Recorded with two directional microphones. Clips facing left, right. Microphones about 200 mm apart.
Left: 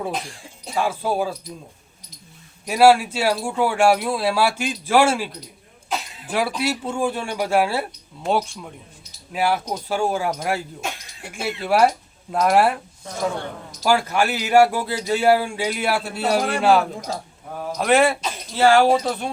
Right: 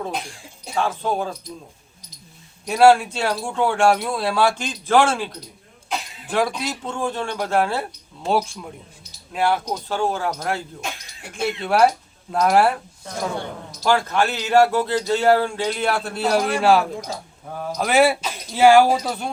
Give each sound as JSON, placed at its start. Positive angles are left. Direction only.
{"t": 0.7, "sound": "speech", "side_deg": 10}
{"t": 2.6, "sound": "speech", "side_deg": 5}